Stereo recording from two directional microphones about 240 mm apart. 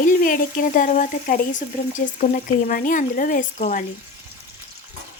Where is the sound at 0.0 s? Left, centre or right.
Left.